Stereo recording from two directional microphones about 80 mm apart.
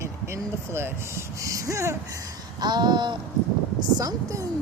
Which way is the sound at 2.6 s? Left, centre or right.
Right.